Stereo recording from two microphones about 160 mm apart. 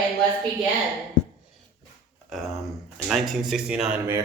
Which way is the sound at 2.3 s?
Centre (ahead or behind).